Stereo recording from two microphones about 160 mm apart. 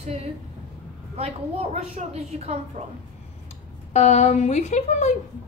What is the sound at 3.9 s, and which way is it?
Speech, 45° left (ahead or behind).